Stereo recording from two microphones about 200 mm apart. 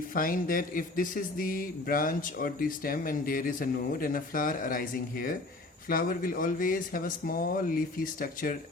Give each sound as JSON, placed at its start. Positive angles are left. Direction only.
{"t": 0.1, "sound": "speech", "side_deg": 45}